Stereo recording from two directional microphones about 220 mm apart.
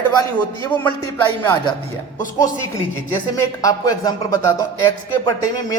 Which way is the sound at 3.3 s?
15° left (ahead or behind).